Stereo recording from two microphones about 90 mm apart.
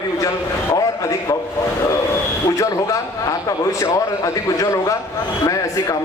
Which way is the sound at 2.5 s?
40° left (ahead or behind).